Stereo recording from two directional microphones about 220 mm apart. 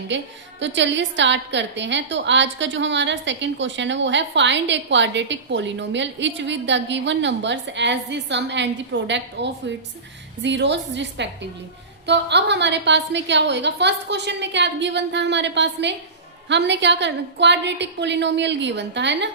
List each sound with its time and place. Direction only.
0.1 s a woman's voice: 55° right (ahead or behind)